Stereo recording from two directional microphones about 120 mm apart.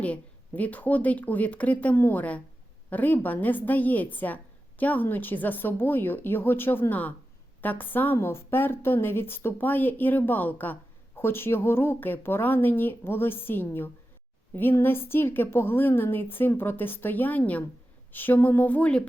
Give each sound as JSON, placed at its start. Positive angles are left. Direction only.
{"t": 0.0, "sound": "a woman's voice", "side_deg": 10}